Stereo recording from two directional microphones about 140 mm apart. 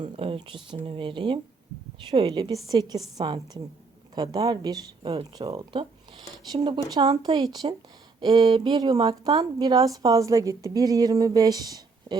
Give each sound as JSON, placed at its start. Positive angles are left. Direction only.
{"t": 0.0, "sound": "a woman's voice", "side_deg": -40}
{"t": 4.1, "sound": "a woman's voice", "side_deg": -30}